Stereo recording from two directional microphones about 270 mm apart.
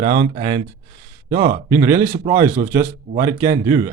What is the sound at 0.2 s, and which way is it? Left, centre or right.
Speech, centre.